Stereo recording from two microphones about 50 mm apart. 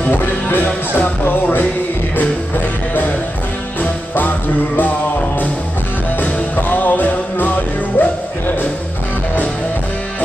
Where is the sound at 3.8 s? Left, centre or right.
Left.